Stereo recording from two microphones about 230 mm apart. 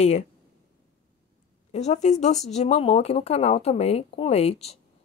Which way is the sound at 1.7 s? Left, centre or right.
Left.